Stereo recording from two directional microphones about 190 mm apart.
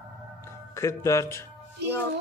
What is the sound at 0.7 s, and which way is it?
Speech, 15° left (ahead or behind).